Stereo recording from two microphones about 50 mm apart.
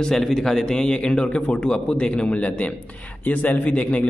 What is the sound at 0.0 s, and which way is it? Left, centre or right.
A man's voice, centre.